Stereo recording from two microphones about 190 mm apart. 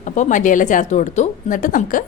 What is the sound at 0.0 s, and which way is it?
A woman's voice, 40° left (ahead or behind).